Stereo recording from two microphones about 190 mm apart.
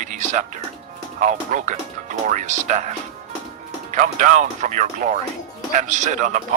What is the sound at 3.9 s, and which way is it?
Speech, 40° right (ahead or behind).